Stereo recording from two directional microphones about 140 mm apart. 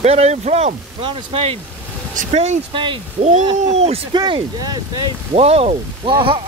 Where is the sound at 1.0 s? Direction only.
40° right (ahead or behind).